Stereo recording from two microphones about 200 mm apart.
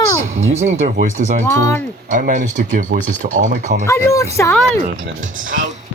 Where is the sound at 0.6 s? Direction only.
35° right (ahead or behind).